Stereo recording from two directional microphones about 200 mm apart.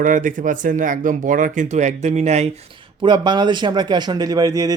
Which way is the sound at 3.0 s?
25° right (ahead or behind).